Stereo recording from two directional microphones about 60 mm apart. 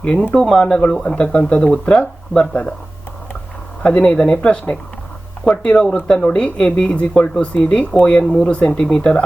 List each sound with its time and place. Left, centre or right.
0.0 s speech: centre
3.8 s speech: centre